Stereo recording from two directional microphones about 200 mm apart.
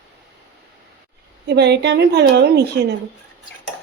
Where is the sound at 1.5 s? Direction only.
55° right (ahead or behind).